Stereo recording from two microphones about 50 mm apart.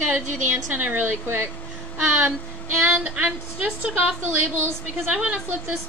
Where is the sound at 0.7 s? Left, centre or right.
Right.